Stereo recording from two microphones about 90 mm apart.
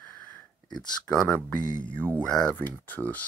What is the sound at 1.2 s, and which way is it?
Speech, 20° left (ahead or behind).